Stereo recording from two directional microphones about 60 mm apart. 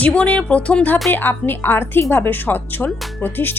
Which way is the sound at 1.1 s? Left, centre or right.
Left.